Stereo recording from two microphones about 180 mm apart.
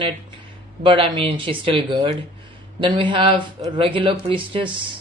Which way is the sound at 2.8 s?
25° right (ahead or behind).